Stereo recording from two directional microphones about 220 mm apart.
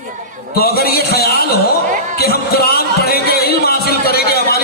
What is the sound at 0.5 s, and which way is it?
Speech, 45° left (ahead or behind).